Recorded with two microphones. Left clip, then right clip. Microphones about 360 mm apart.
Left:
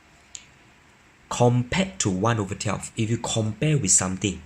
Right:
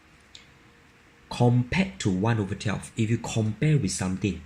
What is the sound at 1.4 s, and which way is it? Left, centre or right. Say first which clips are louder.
Speech: left 3 dB; left.